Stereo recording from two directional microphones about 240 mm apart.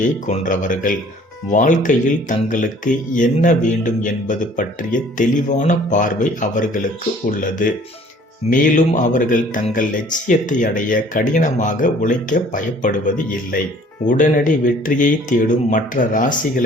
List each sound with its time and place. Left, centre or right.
0.0 s speech: left
8.4 s speech: left